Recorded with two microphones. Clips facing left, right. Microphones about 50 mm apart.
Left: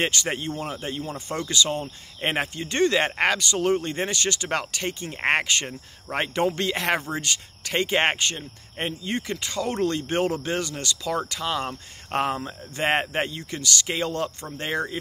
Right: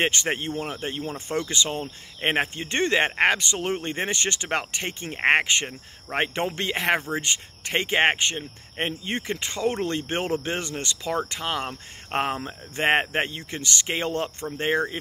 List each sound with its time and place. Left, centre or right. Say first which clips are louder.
0.0 s speech: right 1 dB; right